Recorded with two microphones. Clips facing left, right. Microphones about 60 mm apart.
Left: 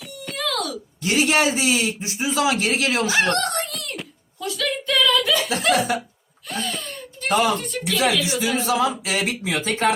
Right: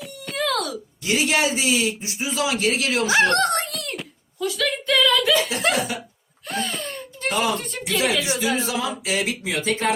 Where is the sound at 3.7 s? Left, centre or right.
Centre.